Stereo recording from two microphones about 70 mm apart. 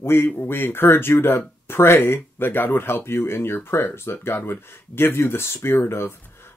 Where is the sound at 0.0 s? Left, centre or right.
Left.